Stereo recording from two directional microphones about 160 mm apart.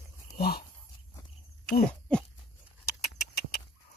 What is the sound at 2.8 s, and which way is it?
Rodents, 75° left (ahead or behind).